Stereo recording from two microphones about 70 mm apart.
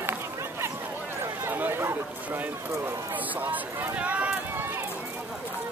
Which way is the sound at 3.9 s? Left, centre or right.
Right.